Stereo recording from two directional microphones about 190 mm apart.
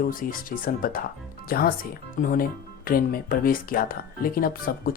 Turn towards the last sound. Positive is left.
turn(degrees=50)  # may be behind; listen again after turning